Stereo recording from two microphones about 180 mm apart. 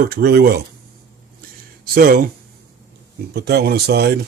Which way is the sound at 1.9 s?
55° right (ahead or behind).